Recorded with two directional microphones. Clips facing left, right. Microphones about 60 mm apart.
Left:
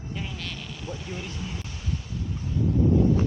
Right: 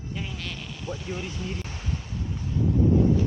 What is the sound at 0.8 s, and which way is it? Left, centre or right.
Speech, centre.